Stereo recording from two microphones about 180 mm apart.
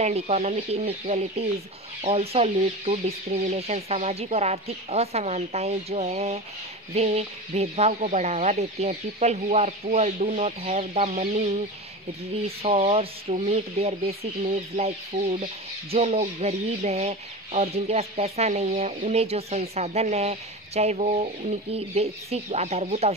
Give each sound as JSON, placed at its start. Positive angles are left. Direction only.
{"t": 0.0, "sound": "speech", "side_deg": -35}